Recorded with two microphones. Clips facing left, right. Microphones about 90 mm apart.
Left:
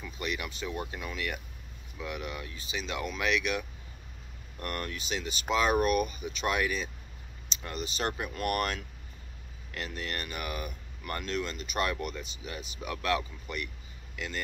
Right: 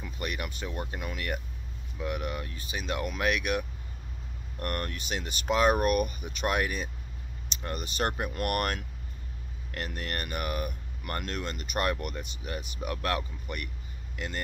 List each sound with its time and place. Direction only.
0.0 s speech: 40° right (ahead or behind)